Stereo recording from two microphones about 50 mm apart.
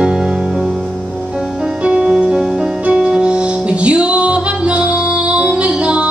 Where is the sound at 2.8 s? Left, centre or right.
Right.